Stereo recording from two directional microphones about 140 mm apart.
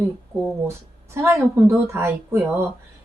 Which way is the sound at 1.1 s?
20° right (ahead or behind).